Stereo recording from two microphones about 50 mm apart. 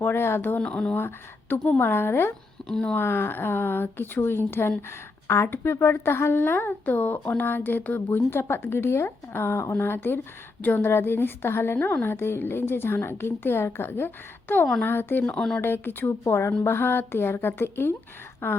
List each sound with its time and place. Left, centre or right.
0.0 s a woman's voice: left
0.6 s speech: left
0.9 s a woman's voice: left
2.6 s a sound: centre
3.0 s a woman's voice: left
8.3 s a woman's voice: left